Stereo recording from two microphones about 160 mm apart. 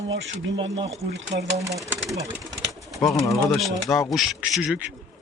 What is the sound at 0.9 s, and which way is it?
Speech, 40° right (ahead or behind).